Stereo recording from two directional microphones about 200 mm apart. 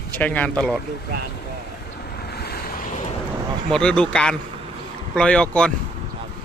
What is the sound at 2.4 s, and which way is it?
Waves, 50° left (ahead or behind).